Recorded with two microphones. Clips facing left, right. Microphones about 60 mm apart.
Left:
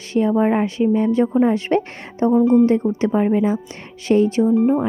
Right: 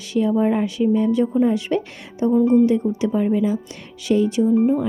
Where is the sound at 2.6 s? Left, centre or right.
Left.